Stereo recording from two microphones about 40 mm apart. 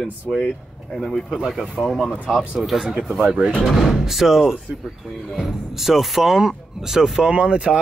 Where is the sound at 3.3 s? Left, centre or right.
Right.